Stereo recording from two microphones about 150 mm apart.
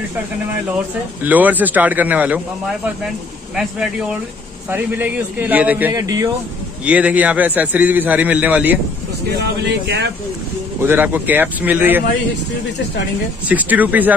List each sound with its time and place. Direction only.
1.2 s a man's voice: 10° right (ahead or behind)
4.6 s a man's voice: 15° right (ahead or behind)
5.9 s speech: 25° right (ahead or behind)
6.9 s a man's voice: 10° right (ahead or behind)
10.8 s a man's voice: 15° right (ahead or behind)
13.5 s a man's voice: 10° right (ahead or behind)